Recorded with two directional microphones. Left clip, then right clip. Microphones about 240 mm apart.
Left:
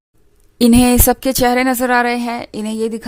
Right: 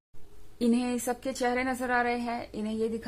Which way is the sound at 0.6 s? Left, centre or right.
Left.